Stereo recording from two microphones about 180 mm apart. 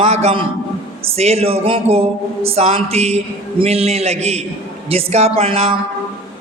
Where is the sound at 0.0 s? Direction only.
35° right (ahead or behind).